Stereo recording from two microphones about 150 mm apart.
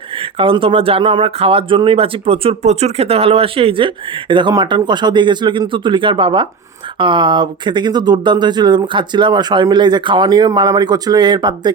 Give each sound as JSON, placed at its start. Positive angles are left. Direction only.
{"t": 0.3, "sound": "speech", "side_deg": -35}